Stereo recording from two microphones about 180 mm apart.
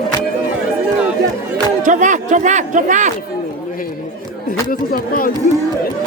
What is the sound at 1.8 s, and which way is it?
Speech, 45° right (ahead or behind).